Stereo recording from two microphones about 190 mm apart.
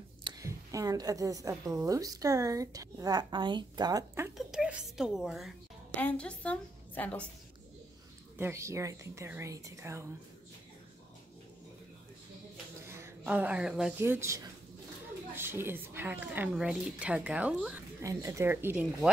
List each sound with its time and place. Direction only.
0.2 s a woman's voice: 20° right (ahead or behind)
4.4 s a woman's voice: 5° right (ahead or behind)
8.4 s a woman's voice: 15° right (ahead or behind)
12.8 s a woman's voice: 10° right (ahead or behind)
18.0 s a woman's voice: 15° right (ahead or behind)